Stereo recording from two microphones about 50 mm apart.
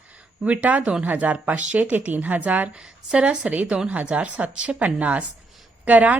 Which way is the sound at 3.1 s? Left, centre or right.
Right.